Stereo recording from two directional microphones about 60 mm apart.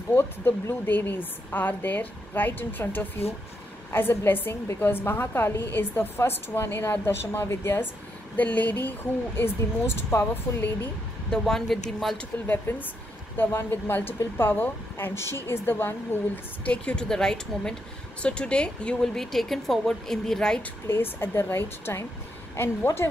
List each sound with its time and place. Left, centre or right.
0.1 s a woman's voice: left
8.4 s speech: left
9.4 s a woman's voice: left
11.2 s speech: centre
12.4 s a woman's voice: left
16.6 s a woman's voice: centre
19.1 s a woman's voice: centre
20.8 s a woman's voice: left